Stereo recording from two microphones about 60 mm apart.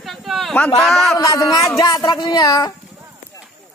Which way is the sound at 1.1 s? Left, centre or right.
Left.